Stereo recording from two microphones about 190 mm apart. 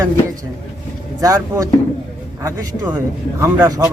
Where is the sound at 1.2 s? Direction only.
15° right (ahead or behind).